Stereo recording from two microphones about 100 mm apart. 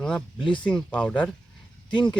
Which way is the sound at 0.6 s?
15° left (ahead or behind).